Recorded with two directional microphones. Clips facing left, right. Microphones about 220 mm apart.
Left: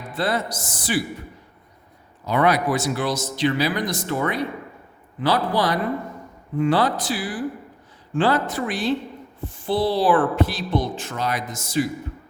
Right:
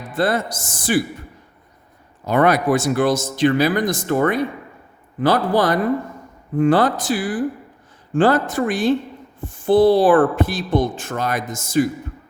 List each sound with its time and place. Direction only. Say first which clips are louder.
0.1 s speech: right 4 dB; 50° right (ahead or behind)
2.2 s speech: right 4 dB; 50° right (ahead or behind)